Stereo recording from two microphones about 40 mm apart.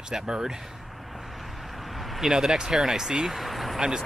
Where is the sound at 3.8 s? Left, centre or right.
Centre.